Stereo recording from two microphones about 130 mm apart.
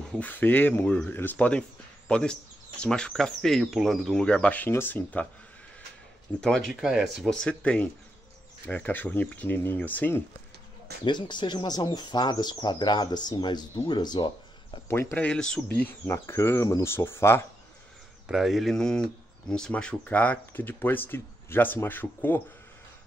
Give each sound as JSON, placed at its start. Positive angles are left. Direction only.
{"t": 0.1, "sound": "speech", "side_deg": 10}
{"t": 6.4, "sound": "speech", "side_deg": 5}
{"t": 11.1, "sound": "speech", "side_deg": 35}
{"t": 14.9, "sound": "speech", "side_deg": 20}
{"t": 15.2, "sound": "speech", "side_deg": 5}
{"t": 18.3, "sound": "speech", "side_deg": 0}